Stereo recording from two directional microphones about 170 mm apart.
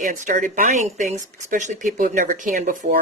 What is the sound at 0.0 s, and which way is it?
Speech, 50° right (ahead or behind).